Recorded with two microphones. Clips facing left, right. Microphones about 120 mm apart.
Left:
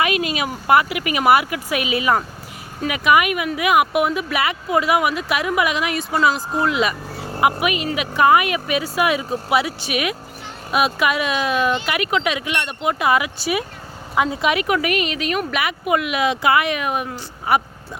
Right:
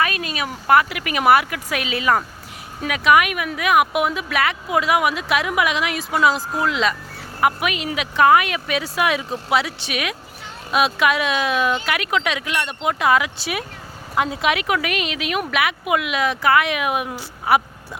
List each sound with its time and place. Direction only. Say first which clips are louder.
0.3 s speech: right 2 dB; 10° left (ahead or behind)
16.2 s speech: even; 15° left (ahead or behind)
16.6 s speech: right 1 dB; centre (ahead or behind)